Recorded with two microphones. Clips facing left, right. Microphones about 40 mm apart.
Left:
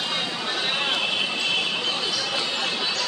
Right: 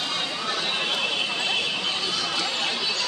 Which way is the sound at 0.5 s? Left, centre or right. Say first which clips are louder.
Left 2 dB; centre.